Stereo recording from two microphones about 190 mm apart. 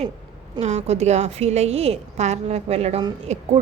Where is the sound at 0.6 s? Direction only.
35° right (ahead or behind).